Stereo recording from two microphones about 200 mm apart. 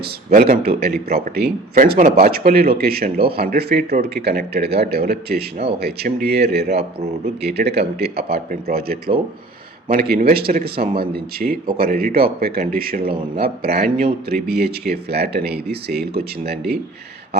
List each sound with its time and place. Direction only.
0.0 s speech: 50° right (ahead or behind)